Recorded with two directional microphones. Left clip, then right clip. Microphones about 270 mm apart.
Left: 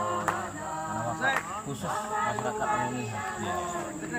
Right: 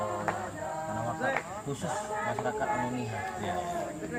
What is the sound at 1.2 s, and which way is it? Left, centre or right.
Speech, left.